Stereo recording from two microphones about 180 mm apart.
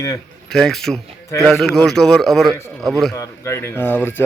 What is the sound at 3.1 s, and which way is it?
Speech, 15° left (ahead or behind).